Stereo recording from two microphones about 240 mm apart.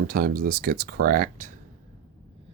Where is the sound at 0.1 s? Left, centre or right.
Right.